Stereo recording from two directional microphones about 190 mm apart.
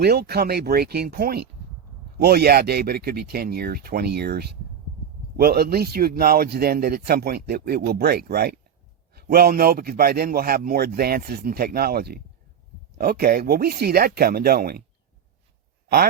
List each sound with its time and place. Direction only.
0.0 s a man's voice: 60° right (ahead or behind)